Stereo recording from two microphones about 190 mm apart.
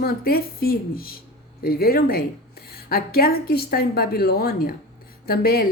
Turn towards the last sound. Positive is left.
turn(degrees=50)  # may be behind; listen again after turning